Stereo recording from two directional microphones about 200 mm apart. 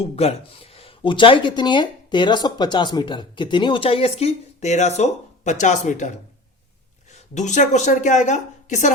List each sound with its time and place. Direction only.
0.0 s speech: 30° left (ahead or behind)
7.1 s a woman's voice: 35° left (ahead or behind)